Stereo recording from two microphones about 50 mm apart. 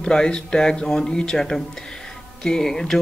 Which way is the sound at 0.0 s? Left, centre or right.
Centre.